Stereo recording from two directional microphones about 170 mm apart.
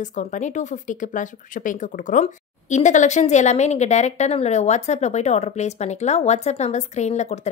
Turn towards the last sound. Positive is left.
turn(degrees=40)  # may be behind; listen again after turning